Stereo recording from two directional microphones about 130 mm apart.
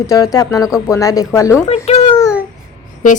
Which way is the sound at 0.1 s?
30° left (ahead or behind).